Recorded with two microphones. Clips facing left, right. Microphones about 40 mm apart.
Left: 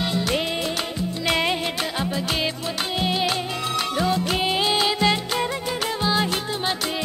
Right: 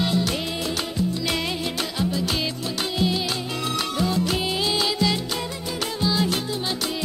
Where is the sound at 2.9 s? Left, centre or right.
Left.